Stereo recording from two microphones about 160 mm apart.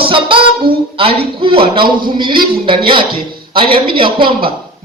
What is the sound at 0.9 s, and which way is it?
A man's voice, 35° right (ahead or behind).